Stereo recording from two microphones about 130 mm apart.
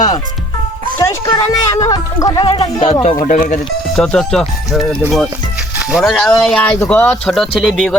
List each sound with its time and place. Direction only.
0.9 s speech: 25° left (ahead or behind)
2.8 s speech: 45° left (ahead or behind)
3.2 s speech: 90° left
3.9 s speech: 5° left (ahead or behind)